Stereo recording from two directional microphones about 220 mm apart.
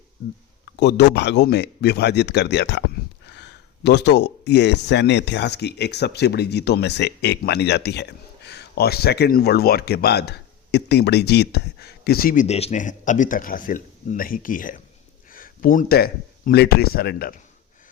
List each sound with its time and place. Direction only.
0.6 s speech: 50° left (ahead or behind)
3.8 s speech: 50° left (ahead or behind)